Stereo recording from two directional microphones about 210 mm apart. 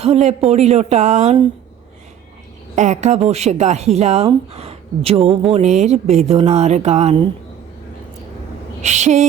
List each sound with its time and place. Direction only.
0.0 s speech: 30° right (ahead or behind)
2.7 s speech: 35° right (ahead or behind)
8.8 s speech: 35° right (ahead or behind)